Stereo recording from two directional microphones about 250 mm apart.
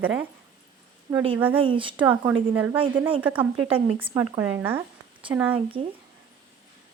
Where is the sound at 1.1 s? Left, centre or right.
Centre.